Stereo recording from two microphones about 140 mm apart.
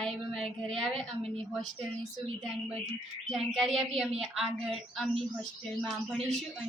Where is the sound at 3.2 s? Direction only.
Centre (ahead or behind).